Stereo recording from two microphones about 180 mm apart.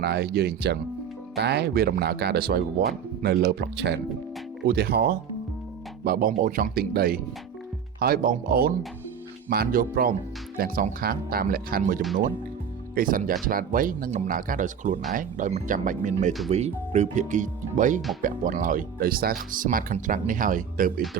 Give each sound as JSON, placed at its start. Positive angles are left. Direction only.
{"t": 0.0, "sound": "speech", "side_deg": -65}